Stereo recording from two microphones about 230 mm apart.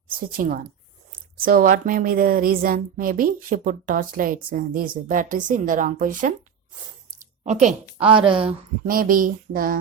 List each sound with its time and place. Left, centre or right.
0.1 s a woman's voice: right
7.4 s a woman's voice: right
8.9 s a woman's voice: right